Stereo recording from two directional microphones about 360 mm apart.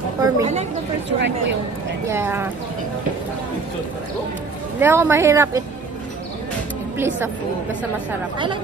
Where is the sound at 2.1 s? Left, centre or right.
Centre.